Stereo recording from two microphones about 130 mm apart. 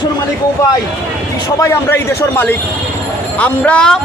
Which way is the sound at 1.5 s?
20° left (ahead or behind).